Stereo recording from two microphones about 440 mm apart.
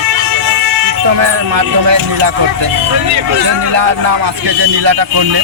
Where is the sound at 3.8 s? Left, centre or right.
Right.